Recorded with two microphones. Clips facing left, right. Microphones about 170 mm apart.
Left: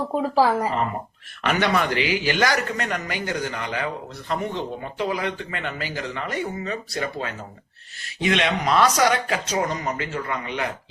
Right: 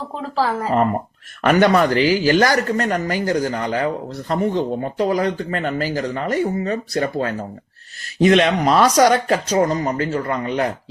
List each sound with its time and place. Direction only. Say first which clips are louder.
0.2 s speech: left 1 dB; 10° left (ahead or behind)
1.4 s speech: right 8 dB; 45° right (ahead or behind)